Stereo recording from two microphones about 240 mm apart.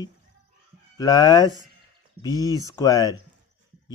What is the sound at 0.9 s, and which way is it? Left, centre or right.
Speech, centre.